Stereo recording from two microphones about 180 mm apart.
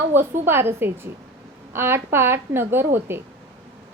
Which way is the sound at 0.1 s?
15° right (ahead or behind).